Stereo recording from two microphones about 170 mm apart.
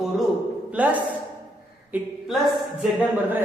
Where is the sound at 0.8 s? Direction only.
10° right (ahead or behind).